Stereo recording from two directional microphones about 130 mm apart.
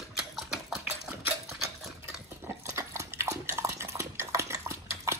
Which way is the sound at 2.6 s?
20° right (ahead or behind).